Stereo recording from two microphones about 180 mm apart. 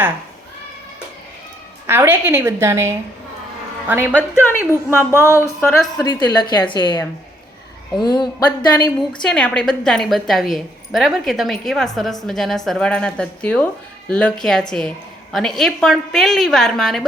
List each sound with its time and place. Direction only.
1.9 s a woman's voice: 10° right (ahead or behind)
4.4 s a sound: 15° left (ahead or behind)
5.6 s a woman's voice: centre (ahead or behind)
6.1 s a woman's voice: 25° left (ahead or behind)
9.0 s a woman's voice: 5° left (ahead or behind)